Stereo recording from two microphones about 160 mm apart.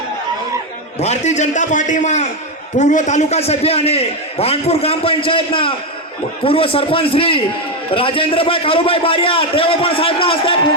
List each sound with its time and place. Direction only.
1.0 s a man's voice: 45° left (ahead or behind)